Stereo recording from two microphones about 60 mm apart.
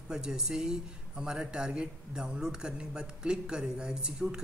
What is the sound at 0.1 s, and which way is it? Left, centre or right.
Speech, centre.